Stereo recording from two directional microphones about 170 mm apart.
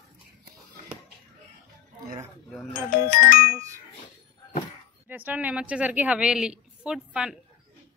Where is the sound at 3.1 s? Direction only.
55° left (ahead or behind).